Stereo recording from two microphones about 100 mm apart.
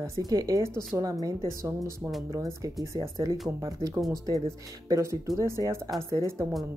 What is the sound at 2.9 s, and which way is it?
Speech, 45° right (ahead or behind).